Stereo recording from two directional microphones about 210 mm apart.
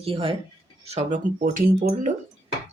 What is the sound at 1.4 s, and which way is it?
Speech, 40° right (ahead or behind).